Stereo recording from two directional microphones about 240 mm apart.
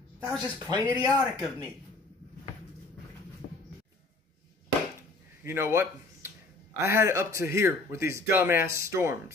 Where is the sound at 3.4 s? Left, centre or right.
Left.